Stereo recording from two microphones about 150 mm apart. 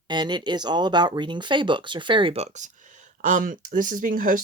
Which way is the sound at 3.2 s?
60° right (ahead or behind).